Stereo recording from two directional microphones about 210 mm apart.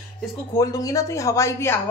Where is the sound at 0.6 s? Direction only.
15° left (ahead or behind).